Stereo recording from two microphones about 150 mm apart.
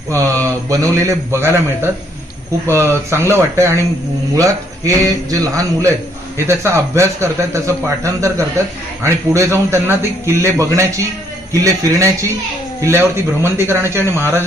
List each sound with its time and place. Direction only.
0.1 s a man's voice: 20° right (ahead or behind)